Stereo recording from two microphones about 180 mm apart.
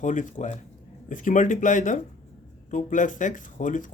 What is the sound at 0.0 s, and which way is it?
Speech, 45° left (ahead or behind).